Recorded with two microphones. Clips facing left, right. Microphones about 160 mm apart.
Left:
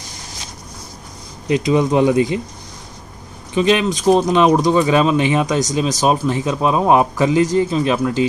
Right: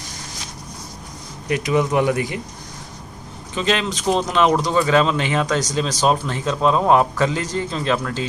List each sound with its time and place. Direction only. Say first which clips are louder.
1.5 s speech: left 4 dB; 20° left (ahead or behind)
3.5 s speech: left 6 dB; 15° left (ahead or behind)